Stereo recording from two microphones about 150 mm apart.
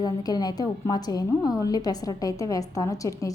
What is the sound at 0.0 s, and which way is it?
A woman's voice, 25° left (ahead or behind).